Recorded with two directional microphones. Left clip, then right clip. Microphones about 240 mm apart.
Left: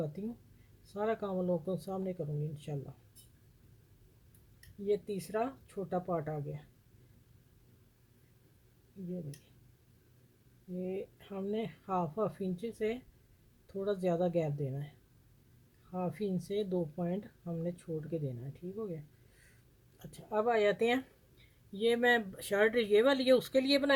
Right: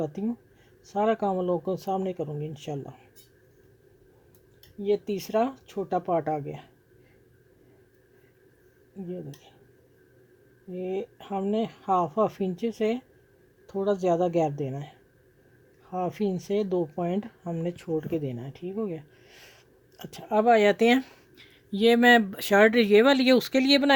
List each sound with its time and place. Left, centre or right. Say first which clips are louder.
0.9 s speech: right 10 dB; right
4.9 s speech: right 8 dB; right
10.8 s speech: right 9 dB; right
15.9 s speech: right 9 dB; right
20.0 s speech: right 9 dB; right